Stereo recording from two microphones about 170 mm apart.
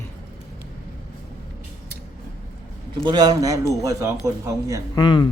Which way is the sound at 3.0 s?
25° right (ahead or behind).